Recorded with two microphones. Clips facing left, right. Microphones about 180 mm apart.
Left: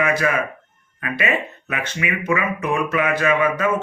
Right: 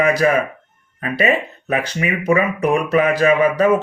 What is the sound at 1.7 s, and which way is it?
Speech, 35° right (ahead or behind).